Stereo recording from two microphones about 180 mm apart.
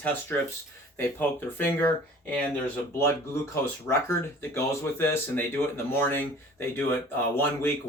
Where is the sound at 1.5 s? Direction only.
10° left (ahead or behind).